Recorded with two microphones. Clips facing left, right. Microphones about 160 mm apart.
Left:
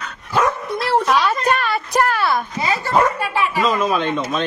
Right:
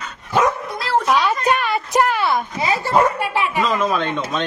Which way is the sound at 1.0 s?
10° right (ahead or behind).